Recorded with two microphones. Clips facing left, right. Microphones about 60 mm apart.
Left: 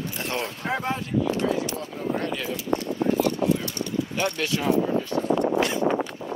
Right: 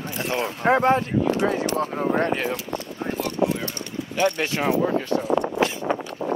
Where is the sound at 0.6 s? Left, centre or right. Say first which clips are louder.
Right 13 dB; right.